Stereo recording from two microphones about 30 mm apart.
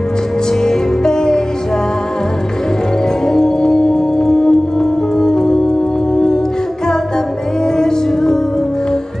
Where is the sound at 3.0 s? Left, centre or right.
Centre.